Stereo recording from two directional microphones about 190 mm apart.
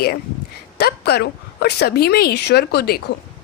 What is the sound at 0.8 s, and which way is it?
A woman's voice, 55° left (ahead or behind).